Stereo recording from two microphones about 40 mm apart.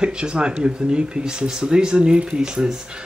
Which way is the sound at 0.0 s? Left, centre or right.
Right.